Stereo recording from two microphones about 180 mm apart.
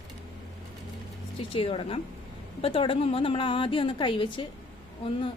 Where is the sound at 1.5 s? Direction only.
30° left (ahead or behind).